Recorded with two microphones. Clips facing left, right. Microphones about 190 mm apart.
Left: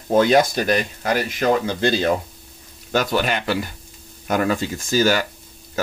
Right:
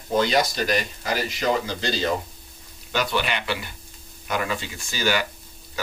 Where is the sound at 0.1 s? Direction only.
50° left (ahead or behind).